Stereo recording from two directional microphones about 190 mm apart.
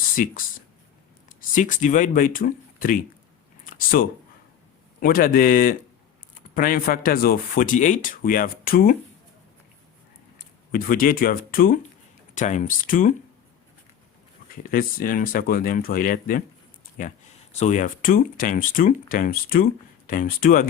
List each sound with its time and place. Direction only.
0.2 s speech: 45° left (ahead or behind)
1.4 s speech: 45° left (ahead or behind)
3.6 s a sound: 45° left (ahead or behind)
4.9 s speech: 50° left (ahead or behind)
10.7 s speech: 50° left (ahead or behind)
14.5 s speech: 50° left (ahead or behind)